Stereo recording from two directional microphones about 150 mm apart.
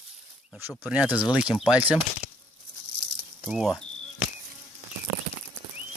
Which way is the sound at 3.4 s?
Centre (ahead or behind).